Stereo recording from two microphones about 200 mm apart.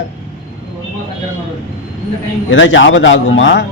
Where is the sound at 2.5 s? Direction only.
70° left (ahead or behind).